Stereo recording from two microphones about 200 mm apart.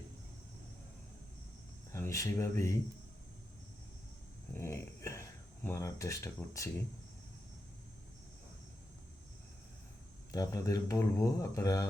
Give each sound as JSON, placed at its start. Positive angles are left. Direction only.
{"t": 1.9, "sound": "speech", "side_deg": 15}
{"t": 4.5, "sound": "a sound", "side_deg": 15}
{"t": 5.6, "sound": "speech", "side_deg": 15}
{"t": 10.3, "sound": "speech", "side_deg": 15}